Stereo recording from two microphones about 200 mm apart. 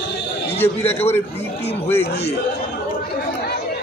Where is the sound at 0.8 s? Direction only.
30° left (ahead or behind).